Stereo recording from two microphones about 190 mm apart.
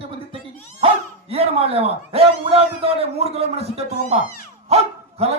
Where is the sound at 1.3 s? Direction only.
30° right (ahead or behind).